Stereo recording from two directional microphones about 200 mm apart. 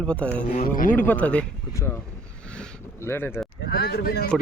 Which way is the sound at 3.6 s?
50° left (ahead or behind).